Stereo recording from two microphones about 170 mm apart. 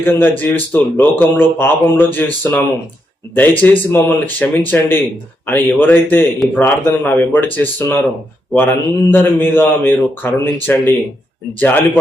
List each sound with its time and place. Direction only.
0.0 s a man's voice: 10° left (ahead or behind)